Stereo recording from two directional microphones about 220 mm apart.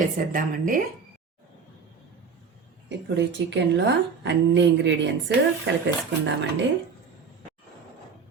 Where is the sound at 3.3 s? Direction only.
55° right (ahead or behind).